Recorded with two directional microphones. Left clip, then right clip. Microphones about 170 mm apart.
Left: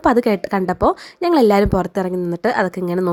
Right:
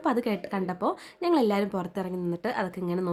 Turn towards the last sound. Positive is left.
turn(degrees=35)  # may be behind; listen again after turning